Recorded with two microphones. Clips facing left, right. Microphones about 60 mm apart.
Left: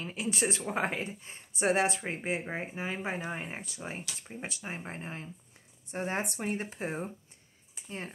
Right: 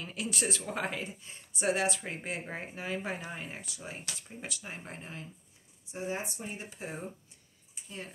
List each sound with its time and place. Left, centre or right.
0.0 s speech: left
5.9 s speech: left